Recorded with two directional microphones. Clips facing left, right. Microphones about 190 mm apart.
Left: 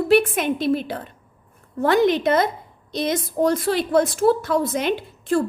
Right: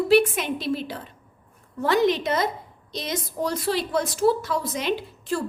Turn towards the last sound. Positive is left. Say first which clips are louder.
# left 6 dB
turn(degrees=50)  # may be behind; listen again after turning